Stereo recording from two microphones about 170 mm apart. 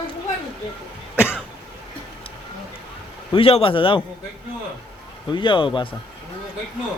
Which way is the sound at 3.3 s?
35° left (ahead or behind).